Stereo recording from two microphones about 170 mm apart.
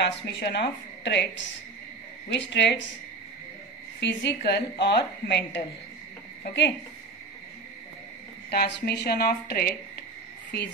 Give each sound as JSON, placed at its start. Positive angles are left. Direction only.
{"t": 0.0, "sound": "a woman's voice", "side_deg": 80}
{"t": 4.0, "sound": "a woman's voice", "side_deg": 85}
{"t": 4.8, "sound": "speech", "side_deg": 90}
{"t": 8.5, "sound": "a woman's voice", "side_deg": 80}